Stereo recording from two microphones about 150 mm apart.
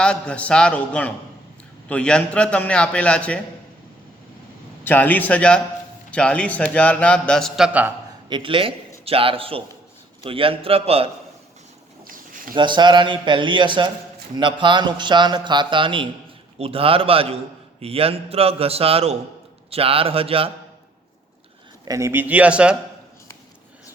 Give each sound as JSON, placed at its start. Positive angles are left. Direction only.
{"t": 0.0, "sound": "a man's voice", "side_deg": 5}
{"t": 4.8, "sound": "a man's voice", "side_deg": 10}
{"t": 8.3, "sound": "a man's voice", "side_deg": -35}
{"t": 12.0, "sound": "a sound", "side_deg": -65}
{"t": 12.5, "sound": "a man's voice", "side_deg": -30}
{"t": 21.8, "sound": "speech", "side_deg": -20}